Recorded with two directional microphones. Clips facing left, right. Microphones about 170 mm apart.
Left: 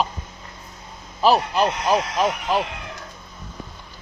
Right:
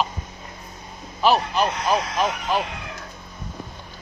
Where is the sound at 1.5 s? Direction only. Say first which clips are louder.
Left 2 dB; 10° left (ahead or behind).